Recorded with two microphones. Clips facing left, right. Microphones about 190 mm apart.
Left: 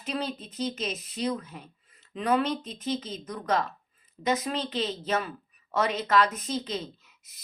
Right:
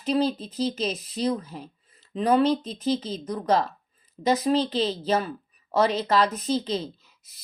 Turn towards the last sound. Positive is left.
turn(degrees=-30)  # may be behind; listen again after turning